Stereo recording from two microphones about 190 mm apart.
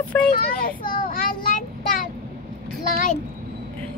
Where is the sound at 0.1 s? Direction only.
10° left (ahead or behind).